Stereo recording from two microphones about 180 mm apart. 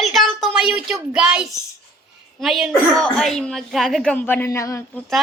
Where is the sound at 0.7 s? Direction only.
5° right (ahead or behind); by 4.8 s 15° left (ahead or behind).